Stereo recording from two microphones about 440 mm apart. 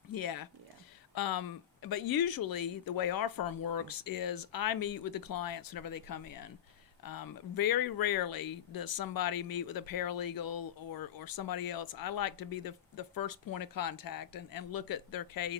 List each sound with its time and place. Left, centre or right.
0.1 s speech: left